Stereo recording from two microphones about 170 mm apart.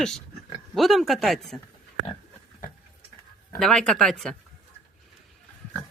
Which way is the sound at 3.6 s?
5° left (ahead or behind).